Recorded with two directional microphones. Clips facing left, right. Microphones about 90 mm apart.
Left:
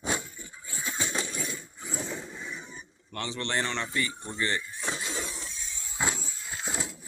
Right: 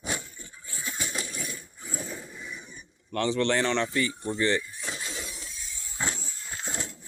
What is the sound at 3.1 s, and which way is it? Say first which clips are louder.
Speech: right 7 dB; 55° right (ahead or behind).